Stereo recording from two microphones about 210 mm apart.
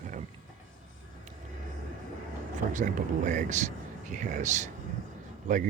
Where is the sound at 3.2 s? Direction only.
35° right (ahead or behind).